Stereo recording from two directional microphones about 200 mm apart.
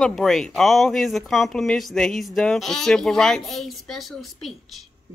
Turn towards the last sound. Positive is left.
turn(degrees=0)  # may be behind; listen again after turning